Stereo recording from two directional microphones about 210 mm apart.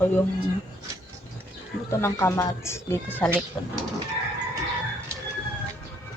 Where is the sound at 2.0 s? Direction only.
15° left (ahead or behind).